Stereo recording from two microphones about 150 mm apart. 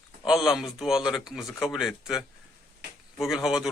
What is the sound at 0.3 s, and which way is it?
Speech, centre (ahead or behind).